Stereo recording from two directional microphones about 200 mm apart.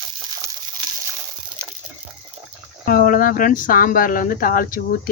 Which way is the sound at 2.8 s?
45° left (ahead or behind).